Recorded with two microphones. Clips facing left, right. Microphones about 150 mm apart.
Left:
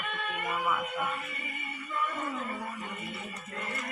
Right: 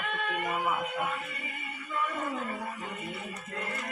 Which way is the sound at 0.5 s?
30° right (ahead or behind).